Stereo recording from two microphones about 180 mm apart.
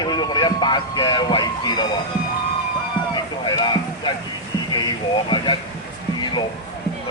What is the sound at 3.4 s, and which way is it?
Music, 25° left (ahead or behind).